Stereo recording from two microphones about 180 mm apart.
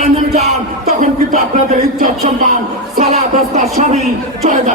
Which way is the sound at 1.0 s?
45° right (ahead or behind).